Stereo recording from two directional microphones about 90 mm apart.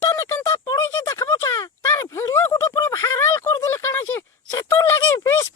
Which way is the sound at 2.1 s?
25° left (ahead or behind).